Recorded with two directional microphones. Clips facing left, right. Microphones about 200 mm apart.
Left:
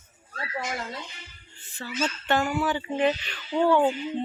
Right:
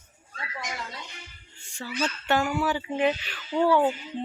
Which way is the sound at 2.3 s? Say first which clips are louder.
Even; 10° right (ahead or behind).